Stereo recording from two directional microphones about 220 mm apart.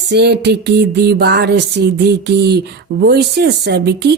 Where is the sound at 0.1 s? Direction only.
50° right (ahead or behind).